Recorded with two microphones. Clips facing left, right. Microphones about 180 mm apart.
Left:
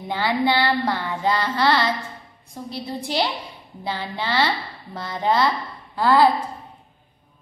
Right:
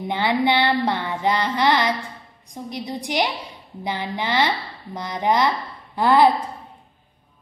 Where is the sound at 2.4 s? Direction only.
15° right (ahead or behind).